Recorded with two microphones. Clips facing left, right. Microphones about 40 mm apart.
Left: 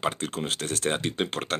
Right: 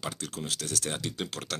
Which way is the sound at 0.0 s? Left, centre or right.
Left.